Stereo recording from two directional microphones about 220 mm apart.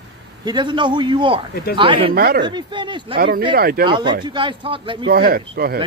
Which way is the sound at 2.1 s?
45° right (ahead or behind).